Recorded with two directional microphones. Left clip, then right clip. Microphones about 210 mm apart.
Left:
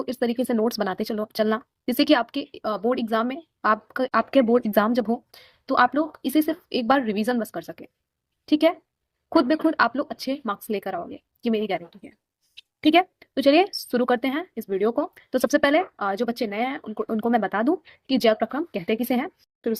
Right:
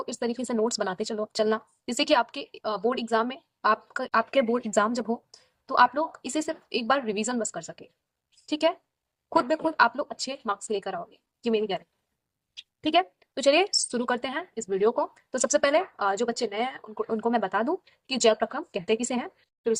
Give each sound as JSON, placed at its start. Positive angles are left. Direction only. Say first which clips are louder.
{"t": 0.0, "sound": "speech", "louder": "left 5 dB", "side_deg": 25}
{"t": 12.8, "sound": "speech", "louder": "left 5 dB", "side_deg": 30}